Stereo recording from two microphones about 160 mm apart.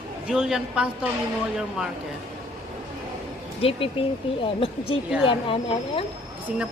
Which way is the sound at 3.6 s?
35° left (ahead or behind).